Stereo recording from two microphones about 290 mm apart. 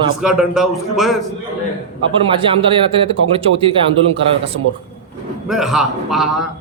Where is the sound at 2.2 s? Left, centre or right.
Centre.